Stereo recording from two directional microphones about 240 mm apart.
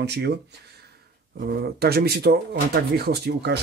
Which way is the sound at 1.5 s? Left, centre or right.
Right.